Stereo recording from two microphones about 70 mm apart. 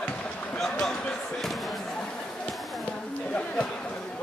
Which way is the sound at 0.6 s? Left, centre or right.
Centre.